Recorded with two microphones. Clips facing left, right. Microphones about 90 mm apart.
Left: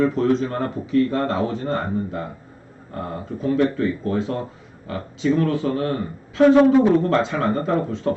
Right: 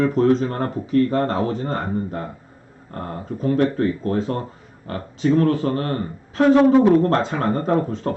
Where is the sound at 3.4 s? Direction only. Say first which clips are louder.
Right 1 dB; 50° right (ahead or behind).